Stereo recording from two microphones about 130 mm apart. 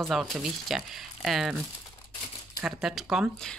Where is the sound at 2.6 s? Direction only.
5° right (ahead or behind).